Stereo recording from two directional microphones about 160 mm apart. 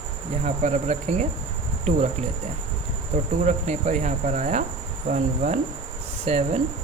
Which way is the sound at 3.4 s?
45° right (ahead or behind).